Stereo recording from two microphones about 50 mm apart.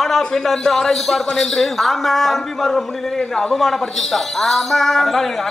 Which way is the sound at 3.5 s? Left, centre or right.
Centre.